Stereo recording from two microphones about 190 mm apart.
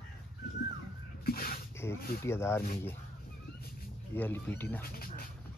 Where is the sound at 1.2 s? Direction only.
50° left (ahead or behind).